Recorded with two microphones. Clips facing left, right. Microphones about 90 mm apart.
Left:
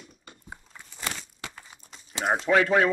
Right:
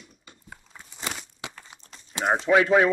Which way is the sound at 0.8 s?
15° right (ahead or behind).